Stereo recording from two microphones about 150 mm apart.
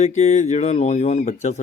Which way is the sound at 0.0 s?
50° left (ahead or behind).